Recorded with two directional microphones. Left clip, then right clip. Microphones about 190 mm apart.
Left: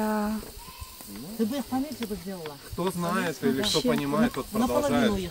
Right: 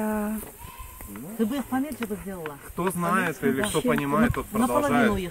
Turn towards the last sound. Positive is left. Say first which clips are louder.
# right 2 dB
turn(degrees=5)  # may be behind; listen again after turning